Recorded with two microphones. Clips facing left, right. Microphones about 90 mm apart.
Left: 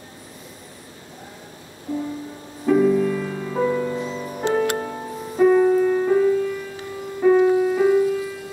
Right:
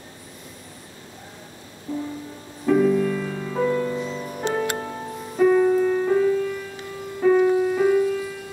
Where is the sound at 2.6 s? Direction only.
5° left (ahead or behind).